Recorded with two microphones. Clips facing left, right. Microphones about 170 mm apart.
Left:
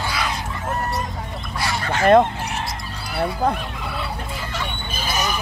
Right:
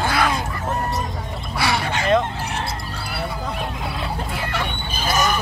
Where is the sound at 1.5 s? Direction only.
70° right (ahead or behind).